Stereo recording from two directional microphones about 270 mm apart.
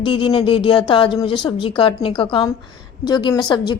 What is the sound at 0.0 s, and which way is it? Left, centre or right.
Speech, centre.